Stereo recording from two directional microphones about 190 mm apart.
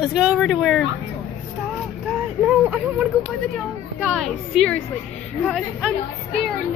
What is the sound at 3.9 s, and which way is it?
Speech, centre (ahead or behind).